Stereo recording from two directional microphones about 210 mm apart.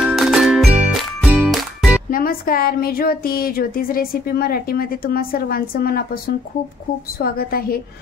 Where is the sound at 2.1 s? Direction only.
45° left (ahead or behind).